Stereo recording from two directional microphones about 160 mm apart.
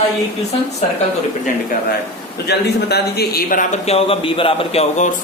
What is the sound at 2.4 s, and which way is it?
Speech, 90° left.